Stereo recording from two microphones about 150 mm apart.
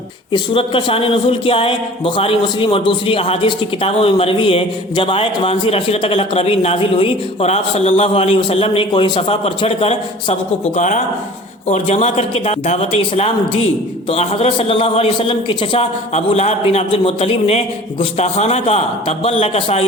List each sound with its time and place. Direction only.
0.3 s speech: 35° left (ahead or behind)
10.8 s a man's voice: 55° left (ahead or behind); by 15.9 s 35° left (ahead or behind)
16.1 s a man's voice: 45° left (ahead or behind)